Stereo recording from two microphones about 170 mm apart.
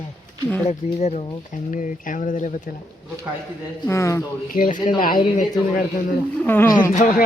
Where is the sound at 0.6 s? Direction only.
40° left (ahead or behind).